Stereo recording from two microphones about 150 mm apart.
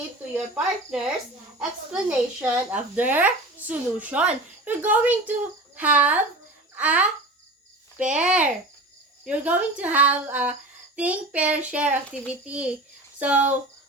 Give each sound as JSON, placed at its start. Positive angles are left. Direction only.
{"t": 0.5, "sound": "a woman's voice", "side_deg": -5}